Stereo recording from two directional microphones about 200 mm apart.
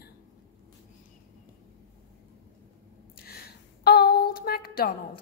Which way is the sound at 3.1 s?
50° left (ahead or behind).